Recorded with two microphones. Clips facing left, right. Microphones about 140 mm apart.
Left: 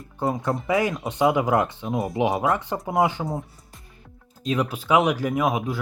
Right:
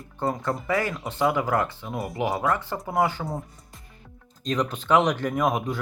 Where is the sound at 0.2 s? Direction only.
10° left (ahead or behind).